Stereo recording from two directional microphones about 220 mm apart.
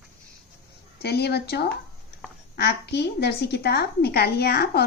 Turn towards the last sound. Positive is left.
turn(degrees=45)  # may be behind; listen again after turning